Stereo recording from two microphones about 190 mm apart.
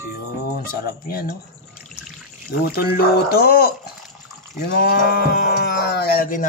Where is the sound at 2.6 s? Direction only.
55° left (ahead or behind).